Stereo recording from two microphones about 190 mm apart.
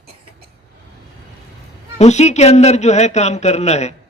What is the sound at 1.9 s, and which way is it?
A man's voice, 35° left (ahead or behind).